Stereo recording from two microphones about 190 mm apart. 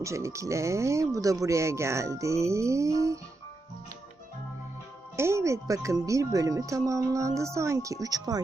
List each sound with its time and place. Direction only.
0.0 s speech: 15° right (ahead or behind)
5.1 s speech: 15° right (ahead or behind)